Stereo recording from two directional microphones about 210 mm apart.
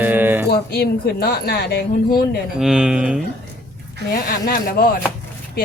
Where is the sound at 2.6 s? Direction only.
Centre (ahead or behind).